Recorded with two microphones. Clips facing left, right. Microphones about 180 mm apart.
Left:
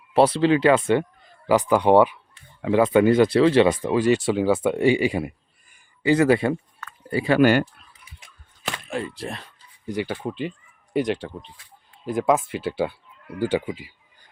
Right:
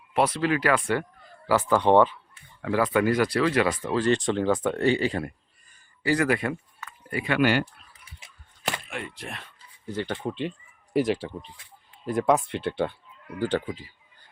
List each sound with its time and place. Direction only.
0.1 s speech: 30° left (ahead or behind)
8.9 s speech: 35° left (ahead or behind)
9.9 s speech: 10° left (ahead or behind)